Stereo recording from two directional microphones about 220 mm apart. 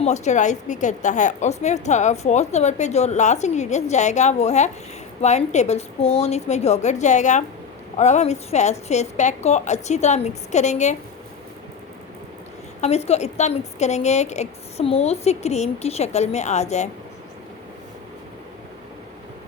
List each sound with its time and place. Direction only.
0.0 s a woman's voice: 30° left (ahead or behind)
12.8 s a woman's voice: 30° left (ahead or behind)